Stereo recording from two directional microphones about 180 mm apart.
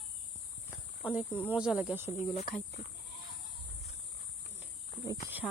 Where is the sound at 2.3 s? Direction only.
35° left (ahead or behind).